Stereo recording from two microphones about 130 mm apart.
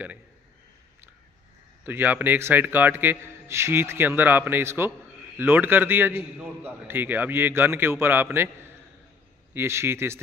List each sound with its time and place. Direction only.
1.9 s a man's voice: 15° right (ahead or behind)
9.5 s a man's voice: 20° right (ahead or behind)